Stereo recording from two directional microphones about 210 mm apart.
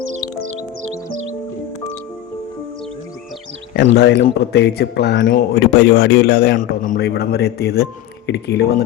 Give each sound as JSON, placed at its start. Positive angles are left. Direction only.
{"t": 3.9, "sound": "a man's voice", "side_deg": 50}